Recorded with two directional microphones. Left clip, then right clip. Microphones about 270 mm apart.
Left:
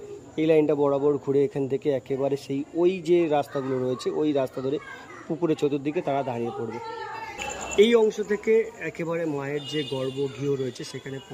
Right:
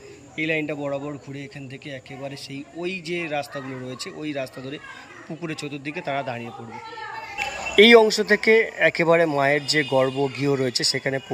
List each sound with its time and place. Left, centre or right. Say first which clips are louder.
0.3 s speech: left 5 dB; centre
7.8 s speech: right 6 dB; right